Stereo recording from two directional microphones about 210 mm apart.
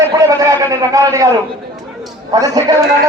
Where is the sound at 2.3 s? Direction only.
20° right (ahead or behind).